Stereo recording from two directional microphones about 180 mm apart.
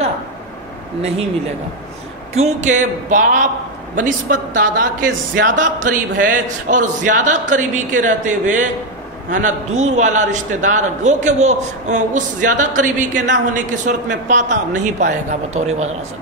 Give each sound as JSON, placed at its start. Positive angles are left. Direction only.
{"t": 2.3, "sound": "a woman's voice", "side_deg": -40}